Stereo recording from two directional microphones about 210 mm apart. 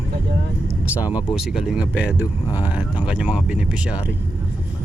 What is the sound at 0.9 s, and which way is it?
Speech, 5° right (ahead or behind).